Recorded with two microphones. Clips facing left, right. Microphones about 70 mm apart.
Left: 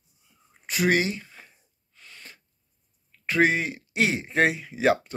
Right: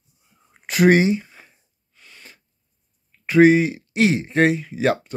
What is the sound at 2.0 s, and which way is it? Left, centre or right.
Sneeze, centre.